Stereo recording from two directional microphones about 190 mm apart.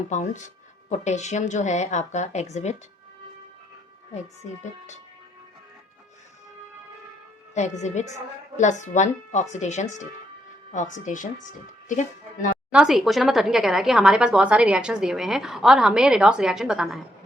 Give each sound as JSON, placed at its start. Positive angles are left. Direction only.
{"t": 0.1, "sound": "speech", "side_deg": 40}
{"t": 7.5, "sound": "speech", "side_deg": 40}
{"t": 12.7, "sound": "speech", "side_deg": 0}